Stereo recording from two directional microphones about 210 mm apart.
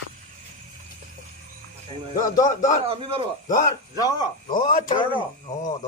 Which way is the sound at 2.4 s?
35° left (ahead or behind).